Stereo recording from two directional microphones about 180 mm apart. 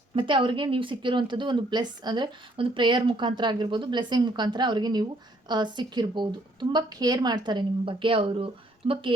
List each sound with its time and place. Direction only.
0.2 s speech: 30° right (ahead or behind)